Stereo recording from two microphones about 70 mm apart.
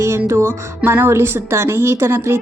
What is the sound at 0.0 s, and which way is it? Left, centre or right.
Music, right.